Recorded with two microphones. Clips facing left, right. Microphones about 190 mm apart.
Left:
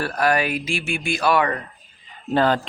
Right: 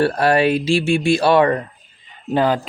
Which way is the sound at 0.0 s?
30° right (ahead or behind).